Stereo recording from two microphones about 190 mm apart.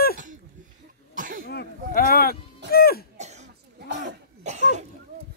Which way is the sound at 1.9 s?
50° left (ahead or behind).